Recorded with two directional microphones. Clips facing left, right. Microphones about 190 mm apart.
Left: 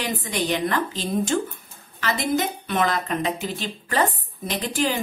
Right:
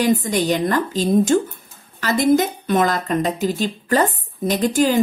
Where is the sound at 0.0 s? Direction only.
45° right (ahead or behind).